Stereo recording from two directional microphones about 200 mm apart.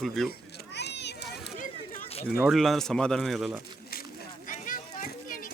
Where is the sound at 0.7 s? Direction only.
55° left (ahead or behind).